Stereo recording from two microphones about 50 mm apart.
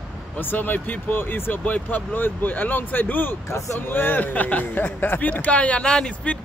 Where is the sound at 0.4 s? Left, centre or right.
Left.